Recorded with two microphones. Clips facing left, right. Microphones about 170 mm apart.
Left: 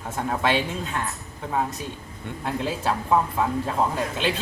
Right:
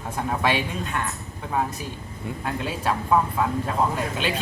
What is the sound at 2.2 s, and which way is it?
Speech, centre (ahead or behind).